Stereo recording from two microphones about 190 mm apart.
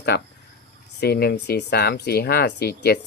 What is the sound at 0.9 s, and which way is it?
Speech, 55° left (ahead or behind).